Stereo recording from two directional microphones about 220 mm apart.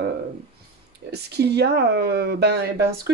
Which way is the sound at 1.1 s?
50° right (ahead or behind).